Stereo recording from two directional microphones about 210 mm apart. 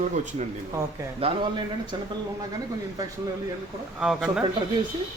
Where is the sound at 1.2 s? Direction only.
30° right (ahead or behind).